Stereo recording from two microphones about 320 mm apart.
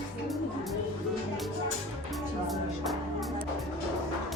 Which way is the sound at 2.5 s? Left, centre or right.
Centre.